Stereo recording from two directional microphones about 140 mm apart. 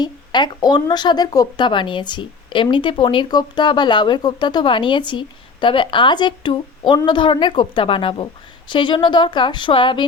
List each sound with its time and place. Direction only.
0.0 s speech: 30° left (ahead or behind)